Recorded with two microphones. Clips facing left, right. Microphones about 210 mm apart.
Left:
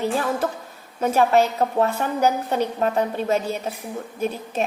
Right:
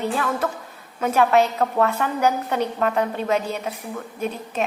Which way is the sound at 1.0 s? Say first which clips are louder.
Even; 30° left (ahead or behind).